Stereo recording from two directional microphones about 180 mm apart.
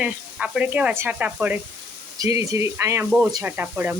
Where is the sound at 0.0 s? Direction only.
5° right (ahead or behind).